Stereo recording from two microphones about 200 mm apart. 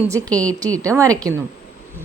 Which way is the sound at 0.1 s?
15° right (ahead or behind).